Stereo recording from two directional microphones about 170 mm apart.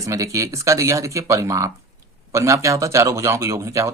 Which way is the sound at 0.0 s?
20° right (ahead or behind).